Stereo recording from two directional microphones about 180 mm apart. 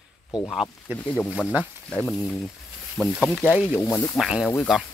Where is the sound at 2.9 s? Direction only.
Centre (ahead or behind).